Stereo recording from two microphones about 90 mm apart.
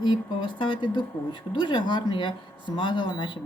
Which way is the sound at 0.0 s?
60° left (ahead or behind).